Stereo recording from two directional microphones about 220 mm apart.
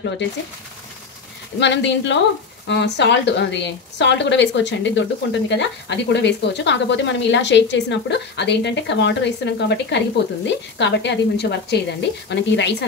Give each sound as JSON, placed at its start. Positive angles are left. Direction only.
{"t": 1.6, "sound": "a woman's voice", "side_deg": 55}